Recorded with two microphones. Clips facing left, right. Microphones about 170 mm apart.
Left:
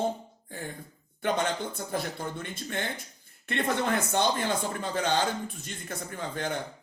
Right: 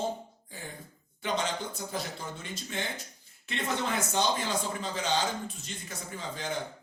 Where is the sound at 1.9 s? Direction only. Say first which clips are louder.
Left 4 dB; 55° left (ahead or behind).